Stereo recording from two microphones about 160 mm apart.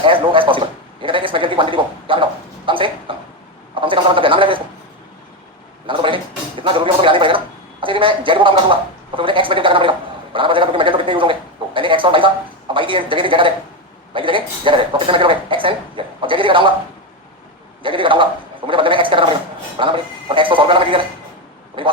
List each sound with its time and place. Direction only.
0.0 s a man's voice: 35° right (ahead or behind)
2.6 s a sound: 30° right (ahead or behind)
3.8 s speech: 30° right (ahead or behind)
5.8 s a sound: 30° right (ahead or behind)
10.3 s speech: 30° right (ahead or behind)
17.8 s speech: 30° right (ahead or behind)